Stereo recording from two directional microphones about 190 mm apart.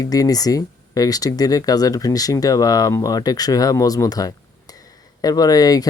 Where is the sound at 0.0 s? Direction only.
20° left (ahead or behind).